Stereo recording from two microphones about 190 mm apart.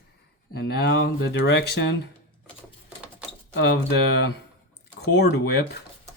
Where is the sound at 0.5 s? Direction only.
60° left (ahead or behind).